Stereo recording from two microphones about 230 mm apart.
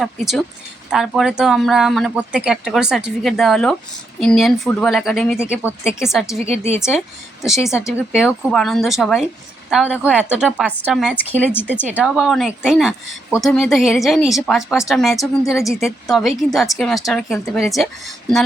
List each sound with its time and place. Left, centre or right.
0.9 s speech: centre
6.4 s speech: right
7.4 s speech: centre
11.5 s speech: centre
11.9 s speech: centre